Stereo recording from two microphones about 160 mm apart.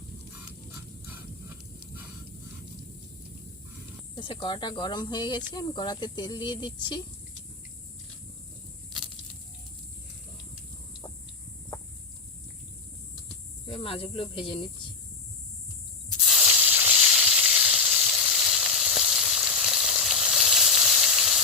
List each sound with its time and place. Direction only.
4.1 s speech: 30° left (ahead or behind)
13.7 s speech: 35° left (ahead or behind)
16.2 s sizzle: 5° right (ahead or behind)